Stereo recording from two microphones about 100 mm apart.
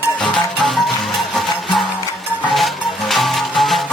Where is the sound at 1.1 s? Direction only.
Centre (ahead or behind).